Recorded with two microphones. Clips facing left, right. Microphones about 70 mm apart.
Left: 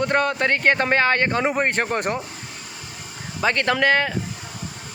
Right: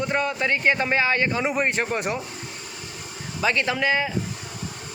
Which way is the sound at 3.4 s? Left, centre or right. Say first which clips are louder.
Left 3 dB; left.